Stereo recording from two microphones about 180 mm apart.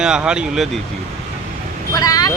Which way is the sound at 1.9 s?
20° left (ahead or behind).